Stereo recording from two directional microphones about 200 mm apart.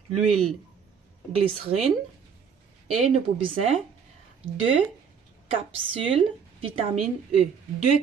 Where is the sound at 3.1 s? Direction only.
30° right (ahead or behind).